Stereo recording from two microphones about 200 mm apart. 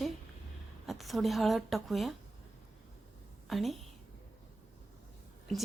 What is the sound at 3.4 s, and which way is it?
Speech, centre (ahead or behind).